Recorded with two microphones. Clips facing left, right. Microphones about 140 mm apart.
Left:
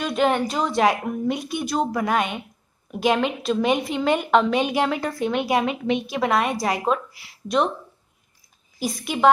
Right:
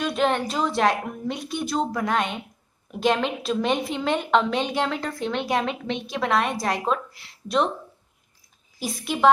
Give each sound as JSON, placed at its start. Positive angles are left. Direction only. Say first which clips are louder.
{"t": 0.0, "sound": "a woman's voice", "louder": "left 2 dB", "side_deg": 0}
{"t": 8.7, "sound": "a woman's voice", "louder": "left 2 dB", "side_deg": 0}